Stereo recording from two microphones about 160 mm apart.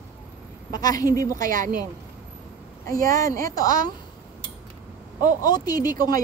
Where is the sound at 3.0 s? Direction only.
20° left (ahead or behind).